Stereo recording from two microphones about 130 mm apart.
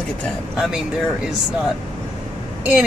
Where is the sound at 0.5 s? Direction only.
5° right (ahead or behind).